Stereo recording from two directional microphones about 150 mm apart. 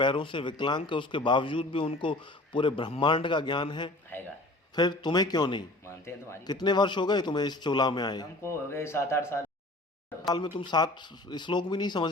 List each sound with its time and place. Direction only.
0.0 s a man's voice: 35° left (ahead or behind)
10.2 s a man's voice: 30° left (ahead or behind)